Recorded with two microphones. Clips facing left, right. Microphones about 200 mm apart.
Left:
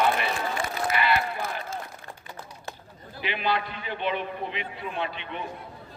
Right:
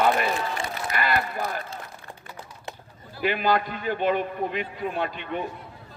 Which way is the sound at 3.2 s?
45° right (ahead or behind).